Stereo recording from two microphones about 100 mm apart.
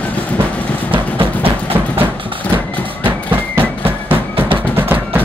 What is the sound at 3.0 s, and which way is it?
Music, 20° right (ahead or behind).